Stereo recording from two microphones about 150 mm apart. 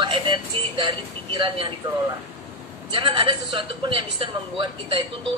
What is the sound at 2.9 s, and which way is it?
A man's voice, 35° right (ahead or behind).